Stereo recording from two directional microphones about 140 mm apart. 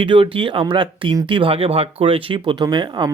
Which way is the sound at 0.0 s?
40° right (ahead or behind).